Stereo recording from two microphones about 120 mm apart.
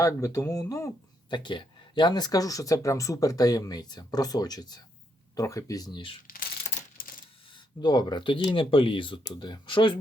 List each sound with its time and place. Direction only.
0.0 s speech: 25° left (ahead or behind)
1.3 s speech: 40° left (ahead or behind)
7.8 s speech: 35° left (ahead or behind)